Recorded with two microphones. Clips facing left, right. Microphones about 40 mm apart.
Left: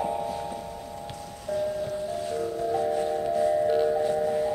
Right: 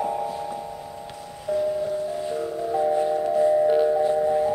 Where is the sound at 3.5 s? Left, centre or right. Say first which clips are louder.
Right 4 dB; centre.